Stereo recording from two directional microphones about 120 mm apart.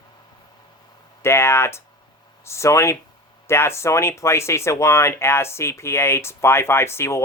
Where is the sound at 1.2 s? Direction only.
20° left (ahead or behind).